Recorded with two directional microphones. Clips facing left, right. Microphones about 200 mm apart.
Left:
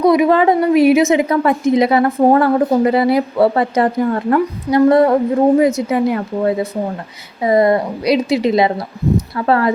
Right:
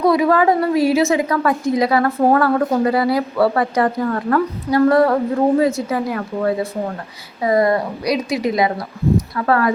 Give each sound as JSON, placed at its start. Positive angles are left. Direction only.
{"t": 0.0, "sound": "a woman's voice", "side_deg": 20}